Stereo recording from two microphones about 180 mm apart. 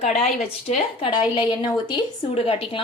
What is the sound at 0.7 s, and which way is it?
A woman's voice, 30° left (ahead or behind).